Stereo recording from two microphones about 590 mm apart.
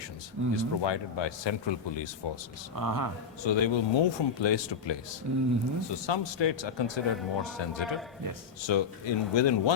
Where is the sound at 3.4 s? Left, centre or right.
Left.